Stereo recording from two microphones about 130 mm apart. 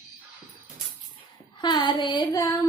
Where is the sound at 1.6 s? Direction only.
35° left (ahead or behind).